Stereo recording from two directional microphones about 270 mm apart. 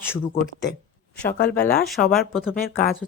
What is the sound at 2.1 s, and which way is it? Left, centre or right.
Speech, centre.